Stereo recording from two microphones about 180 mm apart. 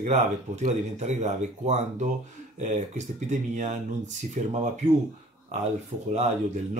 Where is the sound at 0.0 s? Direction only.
40° right (ahead or behind).